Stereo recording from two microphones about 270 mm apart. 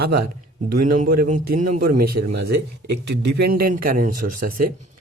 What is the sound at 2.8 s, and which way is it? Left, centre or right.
Speech, right.